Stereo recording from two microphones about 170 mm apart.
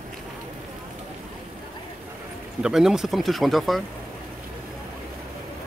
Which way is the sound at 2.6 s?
5° right (ahead or behind).